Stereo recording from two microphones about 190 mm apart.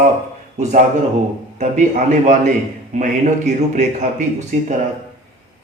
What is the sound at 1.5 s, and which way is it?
A man's voice, 40° right (ahead or behind).